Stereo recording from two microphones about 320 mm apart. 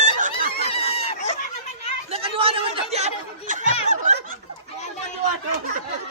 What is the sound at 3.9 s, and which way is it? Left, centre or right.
Snicker, right.